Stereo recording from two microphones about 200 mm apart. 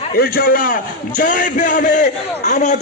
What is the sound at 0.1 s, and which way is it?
A man's voice, 50° left (ahead or behind).